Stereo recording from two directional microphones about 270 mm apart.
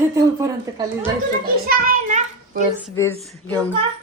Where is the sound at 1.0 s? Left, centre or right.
Right.